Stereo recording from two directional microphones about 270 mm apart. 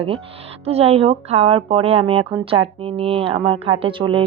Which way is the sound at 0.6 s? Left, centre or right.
Right.